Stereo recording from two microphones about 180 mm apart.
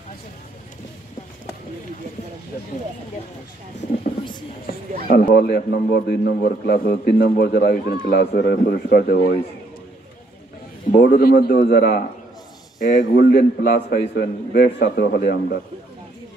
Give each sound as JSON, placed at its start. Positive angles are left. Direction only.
{"t": 4.7, "sound": "a sound", "side_deg": 55}
{"t": 5.1, "sound": "a man's voice", "side_deg": 60}
{"t": 10.9, "sound": "a man's voice", "side_deg": 55}
{"t": 12.8, "sound": "a man's voice", "side_deg": 50}